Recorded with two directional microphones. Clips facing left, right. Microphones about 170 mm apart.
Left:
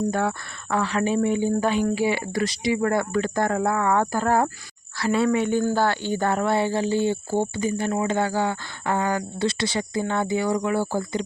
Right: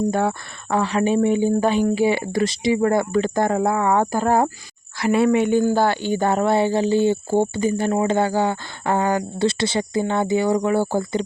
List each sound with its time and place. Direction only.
0.1 s speech: 25° right (ahead or behind)